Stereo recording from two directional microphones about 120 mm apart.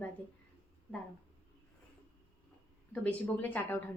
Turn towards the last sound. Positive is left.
turn(degrees=15)  # may be behind; listen again after turning